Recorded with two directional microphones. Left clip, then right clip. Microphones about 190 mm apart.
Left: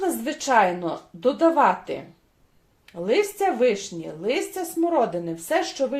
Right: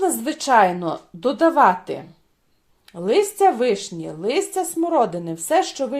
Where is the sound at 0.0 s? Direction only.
40° right (ahead or behind).